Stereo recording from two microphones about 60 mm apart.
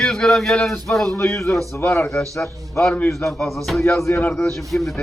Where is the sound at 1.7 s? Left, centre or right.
Left.